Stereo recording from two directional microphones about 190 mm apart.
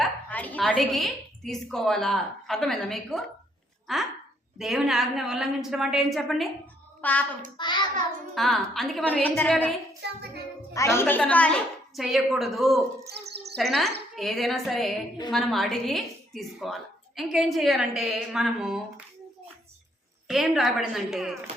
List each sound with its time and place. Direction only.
0.0 s a woman's voice: 10° left (ahead or behind)
7.5 s a child's voice: 25° left (ahead or behind)
8.4 s a woman's voice: centre (ahead or behind)
10.0 s music: 60° right (ahead or behind)
10.8 s a woman's voice: 15° left (ahead or behind); by 19.0 s 5° right (ahead or behind)
20.2 s a woman's voice: centre (ahead or behind)